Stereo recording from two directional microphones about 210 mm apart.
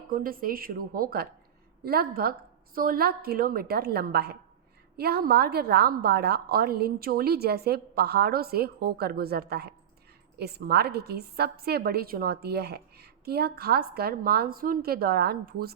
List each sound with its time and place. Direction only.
0.1 s a woman's voice: 45° right (ahead or behind)